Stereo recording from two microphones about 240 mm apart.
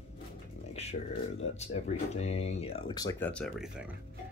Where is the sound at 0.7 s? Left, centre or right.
Left.